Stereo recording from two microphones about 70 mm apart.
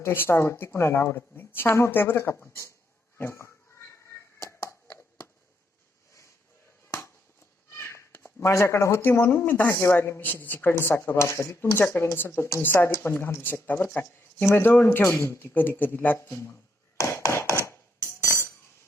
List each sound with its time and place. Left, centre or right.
0.0 s a woman's voice: left
3.2 s a sound: left
7.8 s a woman's voice: left
16.1 s a woman's voice: left
17.0 s a sound: left
18.2 s tambourine: left